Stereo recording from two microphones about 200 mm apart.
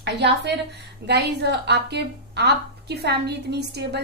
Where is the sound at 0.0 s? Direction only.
55° right (ahead or behind).